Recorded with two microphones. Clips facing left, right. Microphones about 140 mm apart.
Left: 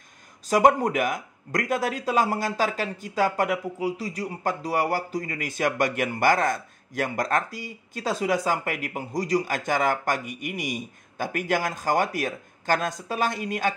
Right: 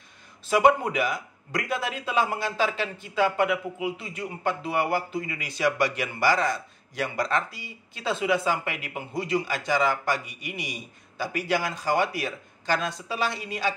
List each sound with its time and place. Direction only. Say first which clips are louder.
0.5 s speech: left 1 dB; 45° left (ahead or behind)